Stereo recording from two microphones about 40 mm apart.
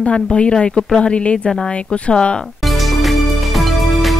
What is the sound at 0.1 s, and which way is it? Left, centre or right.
A woman's voice, left.